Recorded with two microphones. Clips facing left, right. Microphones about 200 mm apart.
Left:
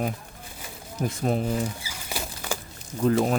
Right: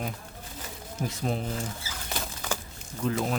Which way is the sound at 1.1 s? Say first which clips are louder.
Left 6 dB; 50° left (ahead or behind).